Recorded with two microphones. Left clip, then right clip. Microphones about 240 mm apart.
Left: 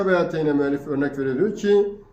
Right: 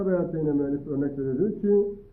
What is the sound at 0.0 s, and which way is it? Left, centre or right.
A man's voice, left.